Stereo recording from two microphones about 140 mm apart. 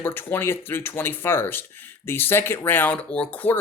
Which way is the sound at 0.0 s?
15° left (ahead or behind).